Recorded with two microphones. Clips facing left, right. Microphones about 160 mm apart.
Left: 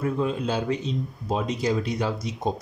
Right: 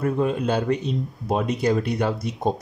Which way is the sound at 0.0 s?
55° right (ahead or behind).